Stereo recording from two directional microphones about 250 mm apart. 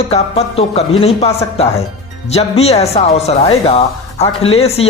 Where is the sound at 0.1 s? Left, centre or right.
Left.